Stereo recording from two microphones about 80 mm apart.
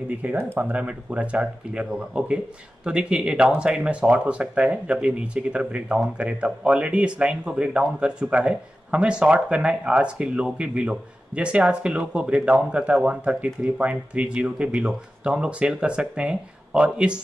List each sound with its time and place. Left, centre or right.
0.2 s speech: centre